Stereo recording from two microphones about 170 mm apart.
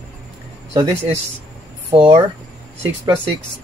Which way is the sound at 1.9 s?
30° right (ahead or behind).